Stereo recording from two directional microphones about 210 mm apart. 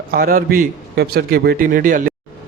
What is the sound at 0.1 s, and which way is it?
A man's voice, 45° right (ahead or behind).